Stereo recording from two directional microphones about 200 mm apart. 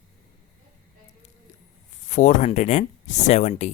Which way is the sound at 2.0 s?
35° left (ahead or behind).